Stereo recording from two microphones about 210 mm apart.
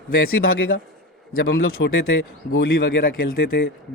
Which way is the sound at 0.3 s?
70° left (ahead or behind).